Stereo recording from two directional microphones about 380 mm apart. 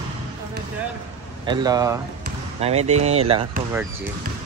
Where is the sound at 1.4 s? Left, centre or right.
Centre.